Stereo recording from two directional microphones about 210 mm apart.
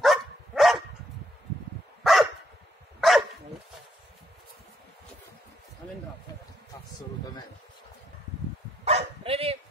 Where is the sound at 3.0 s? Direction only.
Centre (ahead or behind).